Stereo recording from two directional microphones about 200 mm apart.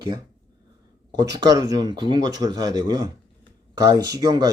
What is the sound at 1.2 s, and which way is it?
Speech, 15° right (ahead or behind).